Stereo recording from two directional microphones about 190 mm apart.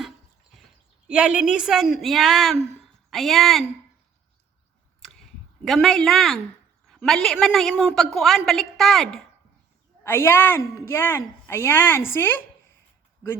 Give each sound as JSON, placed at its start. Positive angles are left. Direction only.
{"t": 1.0, "sound": "a woman's voice", "side_deg": -5}
{"t": 5.0, "sound": "a sound", "side_deg": 0}
{"t": 6.8, "sound": "a woman's voice", "side_deg": 0}
{"t": 10.0, "sound": "a woman's voice", "side_deg": 10}